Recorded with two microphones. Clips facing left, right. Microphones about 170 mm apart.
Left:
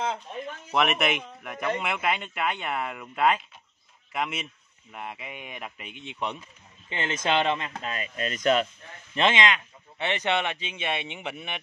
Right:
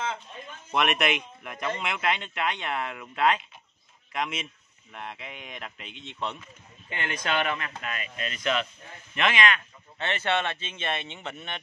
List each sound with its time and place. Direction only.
0.7 s a man's voice: centre (ahead or behind); by 8.6 s 40° left (ahead or behind)
9.1 s speech: 25° left (ahead or behind); by 11.6 s 10° left (ahead or behind)